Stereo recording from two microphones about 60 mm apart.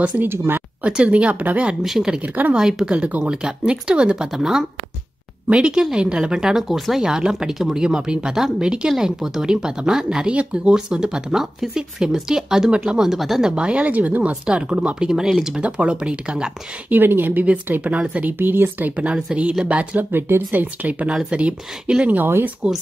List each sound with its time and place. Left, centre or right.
0.2 s speech: right
0.8 s speech: right
1.8 s speech: centre
2.2 s speech: right
2.5 s speech: centre
3.0 s speech: right
3.4 s speech: centre
15.6 s speech: centre
16.9 s speech: right
18.4 s speech: right
20.1 s speech: right
21.1 s speech: centre
22.1 s speech: right